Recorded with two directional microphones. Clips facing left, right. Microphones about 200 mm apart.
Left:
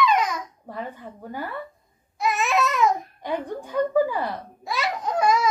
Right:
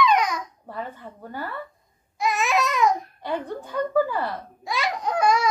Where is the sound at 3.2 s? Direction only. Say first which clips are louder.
Left 1 dB; 15° left (ahead or behind).